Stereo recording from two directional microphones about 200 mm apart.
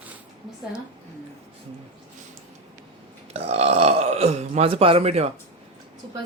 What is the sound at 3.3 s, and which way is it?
Speech, 30° right (ahead or behind).